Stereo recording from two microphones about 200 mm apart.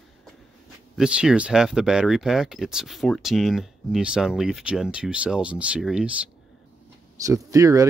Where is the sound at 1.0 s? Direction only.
5° right (ahead or behind).